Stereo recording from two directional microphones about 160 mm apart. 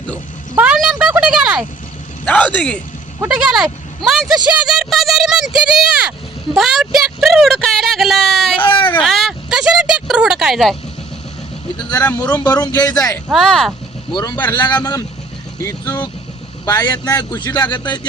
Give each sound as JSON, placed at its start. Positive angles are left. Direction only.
{"t": 0.5, "sound": "a sound", "side_deg": -10}
{"t": 2.2, "sound": "speech", "side_deg": 10}
{"t": 3.2, "sound": "speech", "side_deg": -5}
{"t": 8.5, "sound": "a sound", "side_deg": 35}
{"t": 9.0, "sound": "a sound", "side_deg": 0}
{"t": 11.8, "sound": "speech", "side_deg": 25}
{"t": 12.0, "sound": "speech", "side_deg": 10}
{"t": 12.4, "sound": "speech", "side_deg": 25}
{"t": 13.3, "sound": "speech", "side_deg": 5}
{"t": 14.1, "sound": "speech", "side_deg": 25}